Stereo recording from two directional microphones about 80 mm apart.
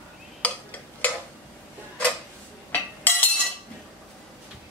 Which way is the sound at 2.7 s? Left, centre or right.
Left.